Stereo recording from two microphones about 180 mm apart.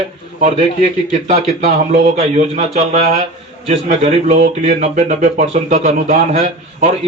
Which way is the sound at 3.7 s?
35° right (ahead or behind).